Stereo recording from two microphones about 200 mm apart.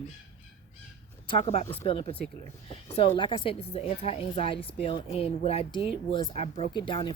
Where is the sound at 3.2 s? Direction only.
25° left (ahead or behind).